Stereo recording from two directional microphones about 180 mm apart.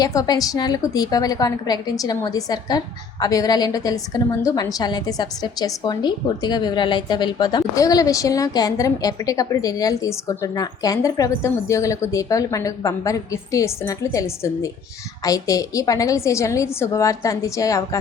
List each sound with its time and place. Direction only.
0.0 s a woman's voice: 20° left (ahead or behind)